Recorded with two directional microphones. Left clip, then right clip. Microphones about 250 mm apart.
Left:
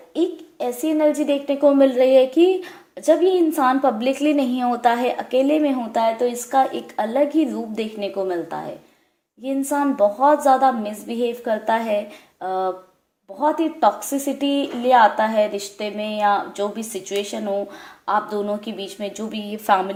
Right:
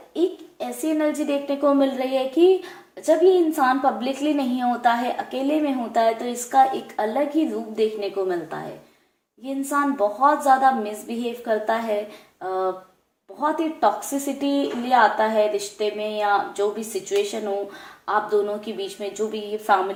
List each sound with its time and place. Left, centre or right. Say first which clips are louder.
0.6 s a woman's voice: left 4 dB; left
12.4 s a sound: left 2 dB; left
13.4 s a woman's voice: left 3 dB; left